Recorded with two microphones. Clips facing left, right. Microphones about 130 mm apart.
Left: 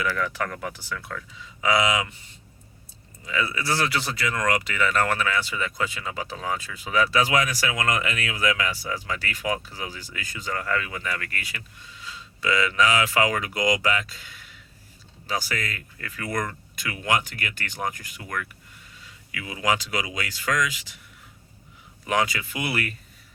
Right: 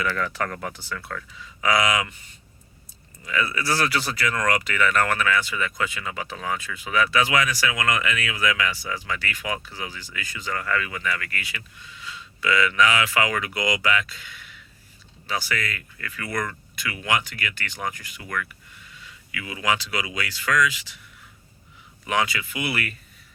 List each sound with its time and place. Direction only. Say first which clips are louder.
0.1 s speech: right 1 dB; 10° left (ahead or behind)
1.6 s speech: even; 25° left (ahead or behind)
3.2 s speech: right 1 dB; 25° left (ahead or behind); by 21.0 s 45° left (ahead or behind)
22.0 s speech: even; 40° left (ahead or behind)